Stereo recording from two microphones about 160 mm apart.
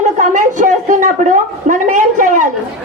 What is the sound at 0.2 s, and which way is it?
A woman's voice, 50° right (ahead or behind).